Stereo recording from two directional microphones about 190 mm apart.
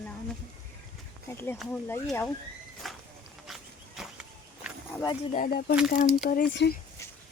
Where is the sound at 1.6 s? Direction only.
5° left (ahead or behind).